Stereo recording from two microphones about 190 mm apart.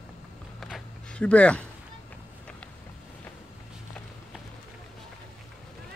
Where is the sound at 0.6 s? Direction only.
Centre (ahead or behind).